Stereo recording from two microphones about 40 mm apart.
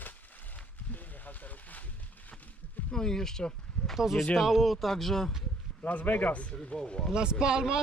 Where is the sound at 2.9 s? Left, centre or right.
Centre.